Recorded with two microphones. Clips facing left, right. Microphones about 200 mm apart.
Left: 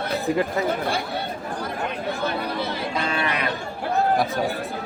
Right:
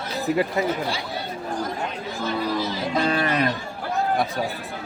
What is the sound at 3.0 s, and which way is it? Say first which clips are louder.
Cattle: right 6 dB; 40° right (ahead or behind).